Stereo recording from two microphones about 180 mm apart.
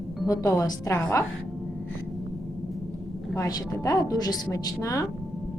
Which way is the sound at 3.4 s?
20° left (ahead or behind).